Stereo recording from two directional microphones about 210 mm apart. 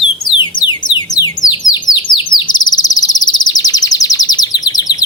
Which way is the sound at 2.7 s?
15° left (ahead or behind).